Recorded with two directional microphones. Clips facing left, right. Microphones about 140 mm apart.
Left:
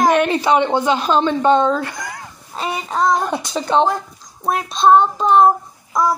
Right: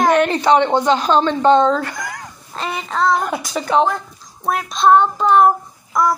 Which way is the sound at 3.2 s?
25° left (ahead or behind).